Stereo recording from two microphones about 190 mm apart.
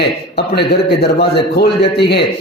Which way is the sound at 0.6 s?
60° left (ahead or behind).